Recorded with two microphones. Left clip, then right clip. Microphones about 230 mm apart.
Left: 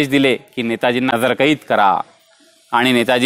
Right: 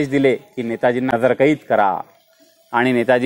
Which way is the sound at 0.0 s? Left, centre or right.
Left.